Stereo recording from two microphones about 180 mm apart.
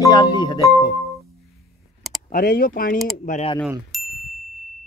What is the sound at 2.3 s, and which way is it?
Speech, 55° left (ahead or behind).